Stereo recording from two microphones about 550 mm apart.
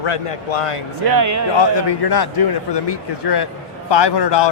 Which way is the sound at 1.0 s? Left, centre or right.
Right.